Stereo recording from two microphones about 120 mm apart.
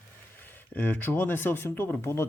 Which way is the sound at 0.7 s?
15° left (ahead or behind).